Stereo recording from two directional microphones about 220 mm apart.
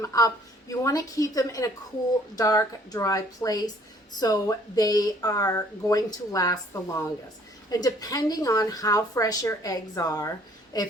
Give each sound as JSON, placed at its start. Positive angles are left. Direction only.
{"t": 0.0, "sound": "a woman's voice", "side_deg": 15}